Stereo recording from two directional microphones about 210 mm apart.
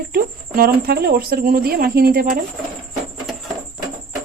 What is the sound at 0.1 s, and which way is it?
Speech, 45° right (ahead or behind).